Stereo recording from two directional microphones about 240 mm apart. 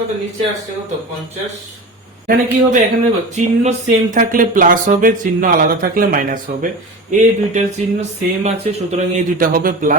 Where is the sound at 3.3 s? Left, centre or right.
Right.